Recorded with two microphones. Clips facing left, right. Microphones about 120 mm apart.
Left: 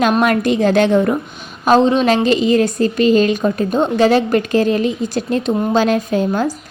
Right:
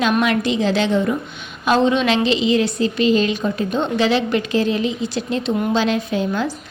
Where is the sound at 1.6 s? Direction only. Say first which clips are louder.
Left 4 dB; 40° left (ahead or behind).